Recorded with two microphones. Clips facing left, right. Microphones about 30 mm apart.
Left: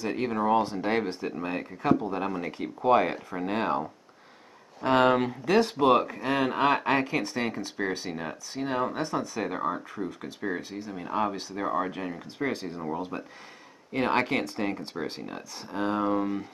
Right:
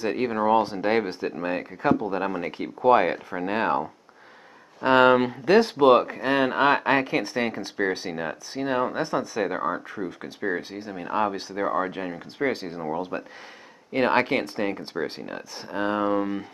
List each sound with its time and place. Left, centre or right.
0.1 s speech: right
5.4 s speech: right
5.8 s speech: right
10.6 s speech: right
11.0 s speech: centre
12.5 s speech: right
12.8 s speech: centre
14.1 s speech: right
15.3 s speech: right